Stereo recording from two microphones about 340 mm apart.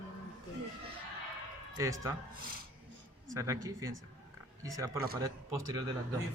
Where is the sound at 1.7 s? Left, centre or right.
Centre.